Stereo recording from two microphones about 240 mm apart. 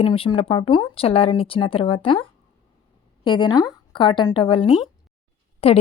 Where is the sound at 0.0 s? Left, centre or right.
Left.